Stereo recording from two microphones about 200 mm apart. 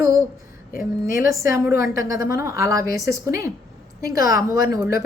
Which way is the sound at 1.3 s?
15° right (ahead or behind).